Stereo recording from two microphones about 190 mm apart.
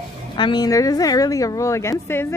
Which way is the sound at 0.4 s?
20° left (ahead or behind).